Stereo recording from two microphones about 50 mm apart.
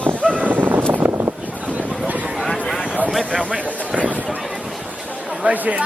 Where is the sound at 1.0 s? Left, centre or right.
Right.